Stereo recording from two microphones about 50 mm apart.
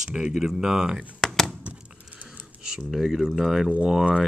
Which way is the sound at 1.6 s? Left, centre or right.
Right.